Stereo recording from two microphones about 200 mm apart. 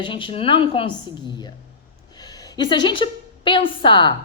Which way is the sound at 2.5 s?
20° left (ahead or behind).